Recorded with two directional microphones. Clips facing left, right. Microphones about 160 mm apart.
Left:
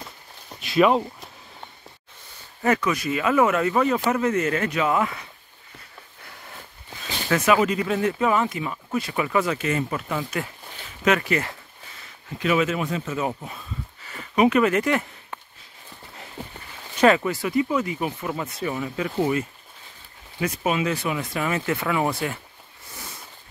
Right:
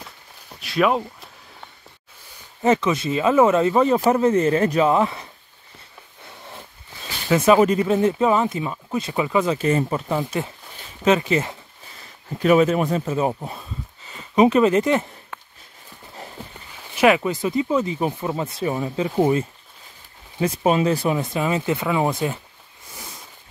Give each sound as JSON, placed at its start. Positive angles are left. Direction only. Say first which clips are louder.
{"t": 0.6, "sound": "speech", "louder": "left 1 dB", "side_deg": 0}
{"t": 2.6, "sound": "speech", "louder": "right 3 dB", "side_deg": -25}
{"t": 7.2, "sound": "speech", "louder": "right 5 dB", "side_deg": -25}
{"t": 9.6, "sound": "speech", "louder": "right 5 dB", "side_deg": -30}
{"t": 12.4, "sound": "speech", "louder": "right 6 dB", "side_deg": -40}
{"t": 16.9, "sound": "speech", "louder": "right 1 dB", "side_deg": -10}
{"t": 21.3, "sound": "speech", "louder": "right 3 dB", "side_deg": -20}